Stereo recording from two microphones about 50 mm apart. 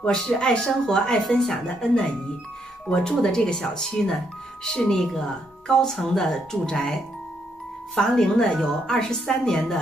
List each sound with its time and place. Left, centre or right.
0.0 s speech: centre